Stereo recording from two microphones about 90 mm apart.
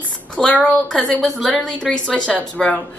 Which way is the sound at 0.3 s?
15° left (ahead or behind).